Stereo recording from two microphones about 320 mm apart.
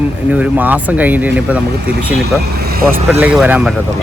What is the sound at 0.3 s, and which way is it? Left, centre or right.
Speech, centre.